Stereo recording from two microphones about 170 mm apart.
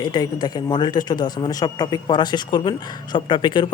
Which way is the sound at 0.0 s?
25° left (ahead or behind).